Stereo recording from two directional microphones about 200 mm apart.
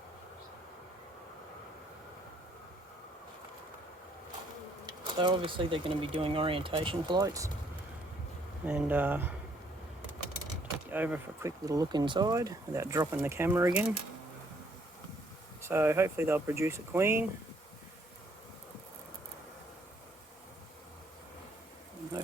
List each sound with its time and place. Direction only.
4.9 s speech: 25° right (ahead or behind)
8.6 s speech: 10° right (ahead or behind)
10.9 s speech: 10° right (ahead or behind)
15.6 s speech: 10° right (ahead or behind)